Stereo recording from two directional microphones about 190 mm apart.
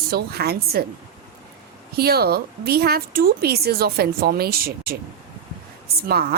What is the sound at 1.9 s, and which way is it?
A woman's voice, 55° right (ahead or behind).